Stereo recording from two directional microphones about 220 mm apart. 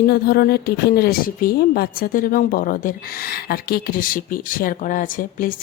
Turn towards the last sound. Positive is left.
turn(degrees=40)  # may be behind; listen again after turning